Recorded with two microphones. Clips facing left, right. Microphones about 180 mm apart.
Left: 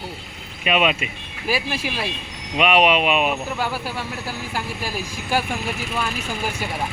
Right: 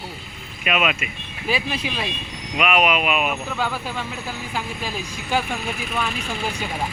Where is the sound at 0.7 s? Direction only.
30° left (ahead or behind).